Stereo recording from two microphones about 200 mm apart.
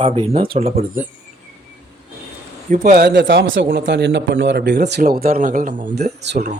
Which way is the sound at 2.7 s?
45° right (ahead or behind).